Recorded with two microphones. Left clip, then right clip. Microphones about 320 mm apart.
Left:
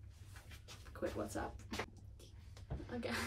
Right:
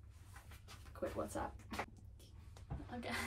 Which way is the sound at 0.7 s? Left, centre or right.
Centre.